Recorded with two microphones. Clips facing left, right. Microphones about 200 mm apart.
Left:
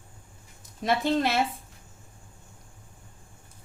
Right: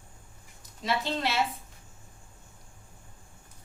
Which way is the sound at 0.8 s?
50° left (ahead or behind).